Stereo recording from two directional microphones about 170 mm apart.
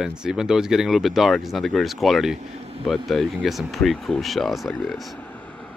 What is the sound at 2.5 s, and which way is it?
Vehicle, 35° right (ahead or behind).